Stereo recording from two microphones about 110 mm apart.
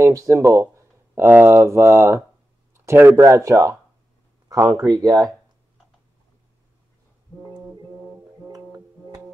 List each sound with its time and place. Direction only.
0.0 s speech: 30° right (ahead or behind)
4.9 s speech: 35° right (ahead or behind)
8.5 s music: 35° right (ahead or behind)